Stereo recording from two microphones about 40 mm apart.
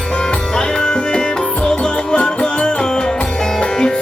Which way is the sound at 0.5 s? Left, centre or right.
Left.